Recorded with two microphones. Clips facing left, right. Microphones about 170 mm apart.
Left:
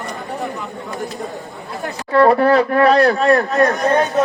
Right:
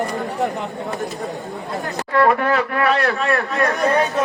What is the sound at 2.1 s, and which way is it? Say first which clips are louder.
Speech: left 5 dB; 35° left (ahead or behind).